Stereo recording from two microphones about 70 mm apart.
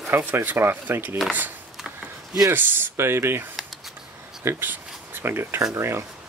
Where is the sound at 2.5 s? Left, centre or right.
Right.